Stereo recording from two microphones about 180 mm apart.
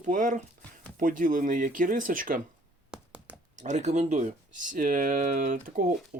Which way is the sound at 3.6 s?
40° right (ahead or behind).